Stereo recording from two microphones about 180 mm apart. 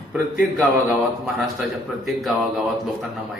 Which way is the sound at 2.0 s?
Centre (ahead or behind).